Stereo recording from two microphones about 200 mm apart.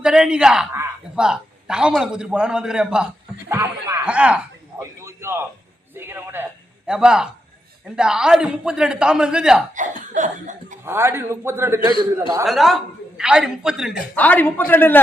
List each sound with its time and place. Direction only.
0.0 s a man's voice: 5° right (ahead or behind)
4.8 s a sound: 15° right (ahead or behind)
5.9 s a man's voice: 10° right (ahead or behind)
9.7 s laughter: 40° right (ahead or behind)
10.8 s a man's voice: 10° right (ahead or behind)
12.5 s a man's voice: centre (ahead or behind)
14.2 s a man's voice: 10° left (ahead or behind)